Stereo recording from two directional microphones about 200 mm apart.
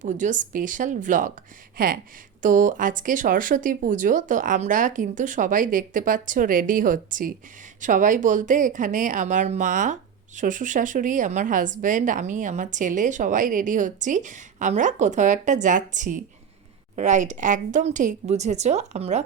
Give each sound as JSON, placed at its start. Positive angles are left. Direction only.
{"t": 0.0, "sound": "speech", "side_deg": -40}